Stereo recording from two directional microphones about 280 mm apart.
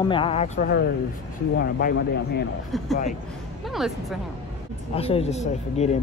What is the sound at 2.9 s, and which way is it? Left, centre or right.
Speech, left.